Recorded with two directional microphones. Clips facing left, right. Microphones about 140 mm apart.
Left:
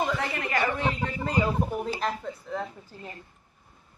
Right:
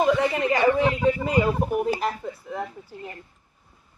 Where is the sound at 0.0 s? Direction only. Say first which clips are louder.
Right 8 dB; 20° right (ahead or behind); by 2.6 s 5° right (ahead or behind).